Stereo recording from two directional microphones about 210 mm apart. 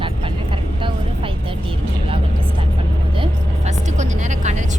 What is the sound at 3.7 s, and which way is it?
Music, 35° right (ahead or behind).